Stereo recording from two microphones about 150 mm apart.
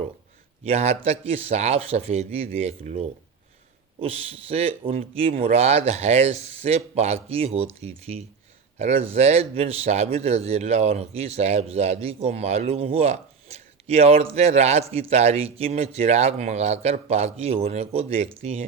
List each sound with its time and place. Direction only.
0.6 s speech: 45° right (ahead or behind)